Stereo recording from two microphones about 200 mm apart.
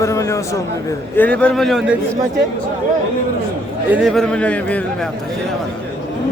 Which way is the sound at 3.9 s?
5° right (ahead or behind).